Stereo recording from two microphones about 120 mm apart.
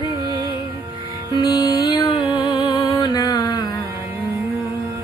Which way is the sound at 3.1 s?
35° left (ahead or behind).